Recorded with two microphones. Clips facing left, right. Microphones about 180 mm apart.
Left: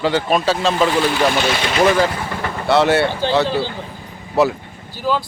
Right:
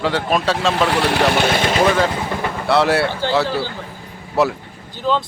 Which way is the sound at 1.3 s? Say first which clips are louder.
Right 2 dB; 55° right (ahead or behind).